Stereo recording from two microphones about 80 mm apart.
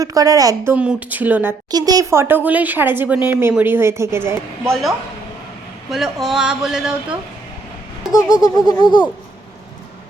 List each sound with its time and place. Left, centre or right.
0.0 s a woman's voice: right
0.8 s a woman's voice: centre
1.7 s a woman's voice: right
2.0 s a woman's voice: right
4.7 s speech: centre
8.1 s speech: left